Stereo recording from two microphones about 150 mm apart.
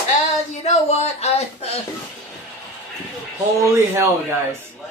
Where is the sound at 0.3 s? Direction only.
50° left (ahead or behind).